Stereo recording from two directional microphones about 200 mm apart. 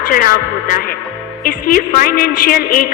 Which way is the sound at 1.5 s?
45° left (ahead or behind).